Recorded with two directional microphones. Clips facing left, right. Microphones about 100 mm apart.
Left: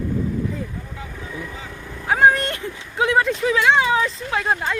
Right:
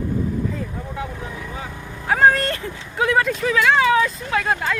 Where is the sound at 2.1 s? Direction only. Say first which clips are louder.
Even; 20° left (ahead or behind).